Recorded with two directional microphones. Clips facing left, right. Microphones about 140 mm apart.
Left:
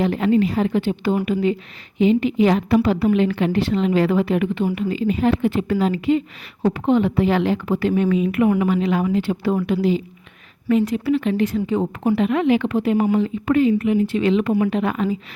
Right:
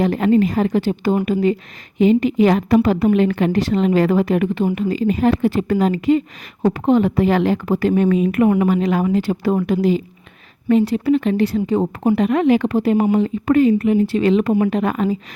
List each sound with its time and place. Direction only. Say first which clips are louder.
0.0 s a woman's voice: right 2 dB; 45° right (ahead or behind)